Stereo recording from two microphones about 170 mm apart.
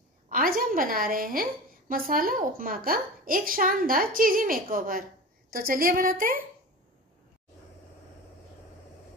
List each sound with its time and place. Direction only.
0.3 s a woman's voice: 55° right (ahead or behind)